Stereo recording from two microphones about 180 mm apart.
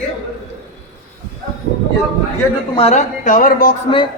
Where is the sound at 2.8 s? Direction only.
35° left (ahead or behind).